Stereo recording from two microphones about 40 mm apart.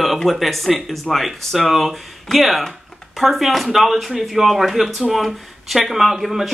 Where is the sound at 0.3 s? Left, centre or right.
Centre.